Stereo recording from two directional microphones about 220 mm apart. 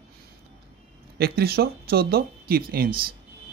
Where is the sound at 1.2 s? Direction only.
45° right (ahead or behind).